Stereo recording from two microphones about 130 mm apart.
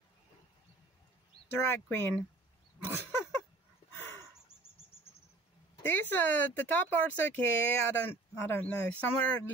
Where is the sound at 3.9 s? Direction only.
15° left (ahead or behind).